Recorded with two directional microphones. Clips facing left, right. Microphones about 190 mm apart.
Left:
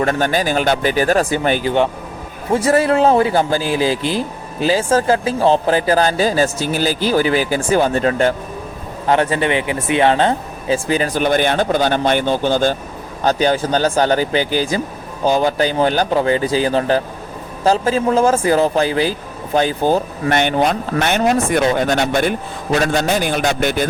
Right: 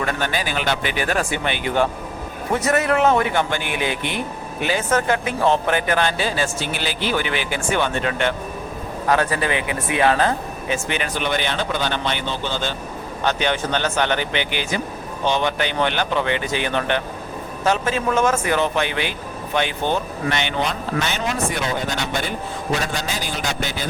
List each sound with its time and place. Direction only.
0.0 s speech: 45° left (ahead or behind)
9.0 s a man's voice: 25° left (ahead or behind); by 23.9 s 55° left (ahead or behind)